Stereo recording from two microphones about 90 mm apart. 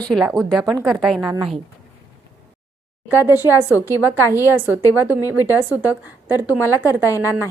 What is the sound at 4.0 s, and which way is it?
Speech, 25° right (ahead or behind).